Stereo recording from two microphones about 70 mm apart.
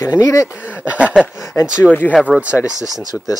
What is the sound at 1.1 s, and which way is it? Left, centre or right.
Speech, centre.